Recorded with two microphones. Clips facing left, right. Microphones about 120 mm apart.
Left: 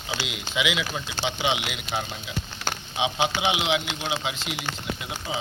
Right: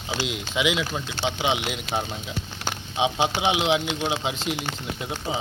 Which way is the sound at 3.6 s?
40° right (ahead or behind).